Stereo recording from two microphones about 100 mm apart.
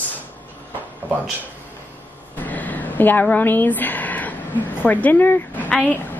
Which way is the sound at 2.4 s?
15° left (ahead or behind).